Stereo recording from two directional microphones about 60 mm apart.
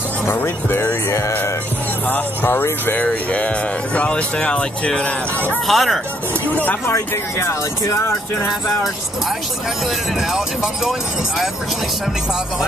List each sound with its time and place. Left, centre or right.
0.3 s speech: left
2.0 s speech: left
3.3 s speech: left
5.7 s speech: centre
6.5 s speech: left
6.9 s speech: left
10.3 s speech: centre